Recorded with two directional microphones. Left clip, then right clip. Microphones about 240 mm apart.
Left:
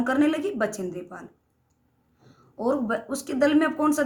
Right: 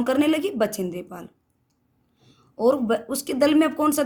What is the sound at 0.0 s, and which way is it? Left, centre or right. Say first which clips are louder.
Speech: right 2 dB; right.